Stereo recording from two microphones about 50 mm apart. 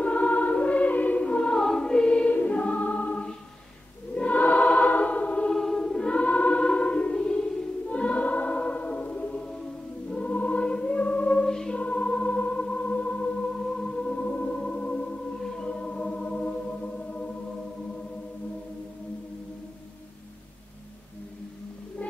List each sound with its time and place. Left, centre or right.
0.0 s music: left
1.6 s choir: centre
2.3 s music: left
4.1 s choir: left
5.5 s choir: centre
6.2 s music: left
7.9 s choir: left
10.1 s music: left
11.4 s music: centre
11.7 s music: left